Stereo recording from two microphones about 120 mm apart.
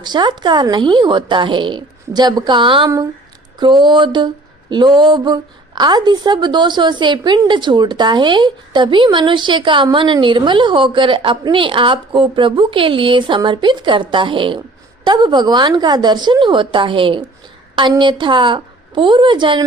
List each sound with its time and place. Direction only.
0.0 s a woman's voice: 40° right (ahead or behind)